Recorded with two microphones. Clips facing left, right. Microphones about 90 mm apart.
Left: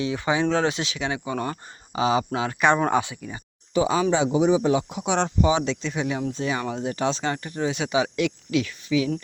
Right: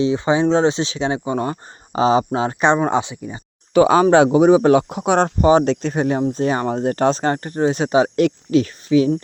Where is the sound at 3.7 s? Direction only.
70° right (ahead or behind).